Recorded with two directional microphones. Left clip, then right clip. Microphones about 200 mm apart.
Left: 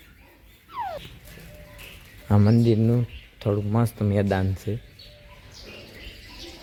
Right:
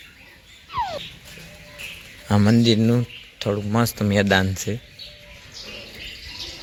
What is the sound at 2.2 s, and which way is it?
Speech, 5° left (ahead or behind).